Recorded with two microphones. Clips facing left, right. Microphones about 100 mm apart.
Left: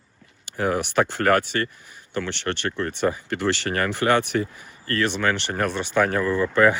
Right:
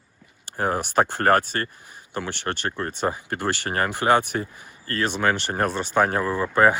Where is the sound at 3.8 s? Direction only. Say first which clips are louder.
Right 1 dB; 15° right (ahead or behind).